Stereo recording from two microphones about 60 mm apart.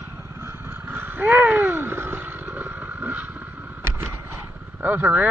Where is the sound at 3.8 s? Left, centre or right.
Right.